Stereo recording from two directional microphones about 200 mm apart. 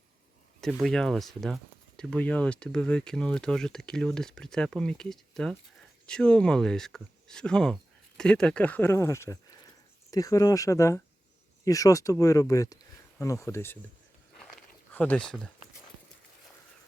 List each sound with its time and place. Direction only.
0.6 s speech: centre (ahead or behind)
14.9 s speech: 5° left (ahead or behind)